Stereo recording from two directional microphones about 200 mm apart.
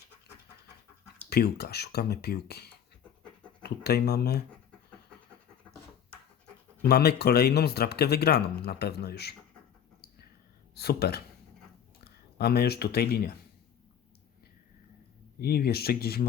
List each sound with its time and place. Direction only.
1.3 s speech: 55° left (ahead or behind)
6.8 s speech: 55° left (ahead or behind)
10.8 s speech: 55° left (ahead or behind)
12.4 s speech: 50° left (ahead or behind)
15.4 s speech: 50° left (ahead or behind)